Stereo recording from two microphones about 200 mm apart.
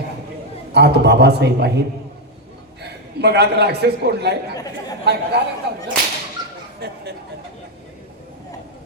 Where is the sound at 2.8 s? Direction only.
55° right (ahead or behind).